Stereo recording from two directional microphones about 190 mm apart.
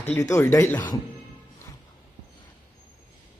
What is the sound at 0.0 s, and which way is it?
Speech, 15° left (ahead or behind).